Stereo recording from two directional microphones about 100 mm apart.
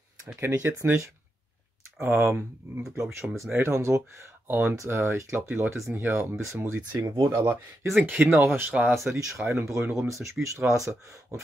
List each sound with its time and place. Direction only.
0.4 s speech: 25° right (ahead or behind)
7.9 s speech: 10° right (ahead or behind)
8.2 s speech: 20° right (ahead or behind)
8.9 s speech: 30° right (ahead or behind)